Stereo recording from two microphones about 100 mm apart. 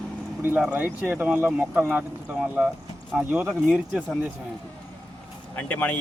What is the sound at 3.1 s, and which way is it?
Speech, 15° right (ahead or behind).